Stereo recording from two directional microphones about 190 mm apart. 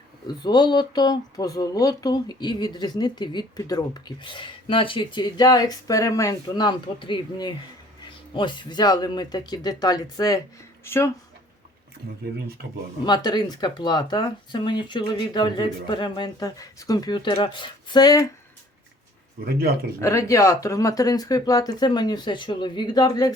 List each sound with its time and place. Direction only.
0.3 s speech: 20° left (ahead or behind)
13.1 s speech: 20° left (ahead or behind)
19.5 s a man's voice: 55° right (ahead or behind)
20.0 s speech: 15° left (ahead or behind)